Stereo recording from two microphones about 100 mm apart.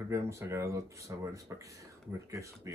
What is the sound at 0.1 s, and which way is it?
Speech, 30° right (ahead or behind).